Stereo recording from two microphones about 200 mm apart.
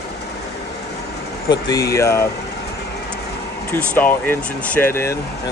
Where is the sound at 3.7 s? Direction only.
10° left (ahead or behind).